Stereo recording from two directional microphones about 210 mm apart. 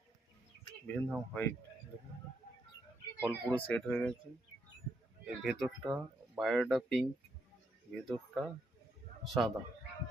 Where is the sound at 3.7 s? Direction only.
5° left (ahead or behind).